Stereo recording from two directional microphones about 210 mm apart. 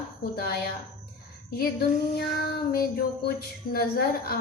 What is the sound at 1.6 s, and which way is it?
A woman's voice, 45° left (ahead or behind).